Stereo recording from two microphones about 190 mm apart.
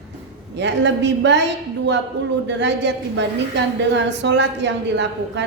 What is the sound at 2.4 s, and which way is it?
A woman's voice, 65° right (ahead or behind).